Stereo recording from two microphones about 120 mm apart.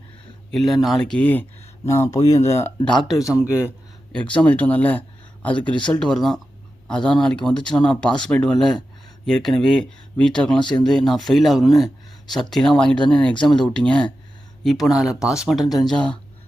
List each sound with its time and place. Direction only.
0.5 s speech: centre (ahead or behind); by 2.7 s 25° left (ahead or behind)
2.8 s speech: centre (ahead or behind)
4.1 s speech: 10° left (ahead or behind)